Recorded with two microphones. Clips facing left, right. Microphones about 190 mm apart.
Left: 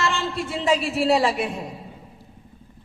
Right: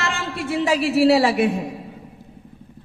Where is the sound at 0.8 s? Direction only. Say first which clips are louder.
Right 5 dB; 75° right (ahead or behind).